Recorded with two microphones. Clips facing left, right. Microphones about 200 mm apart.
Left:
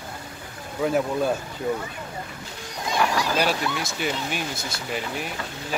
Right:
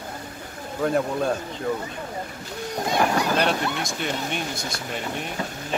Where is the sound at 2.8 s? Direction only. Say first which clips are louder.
Right 2 dB; 55° right (ahead or behind).